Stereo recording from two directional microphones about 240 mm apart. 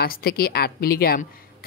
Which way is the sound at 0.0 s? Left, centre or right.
Left.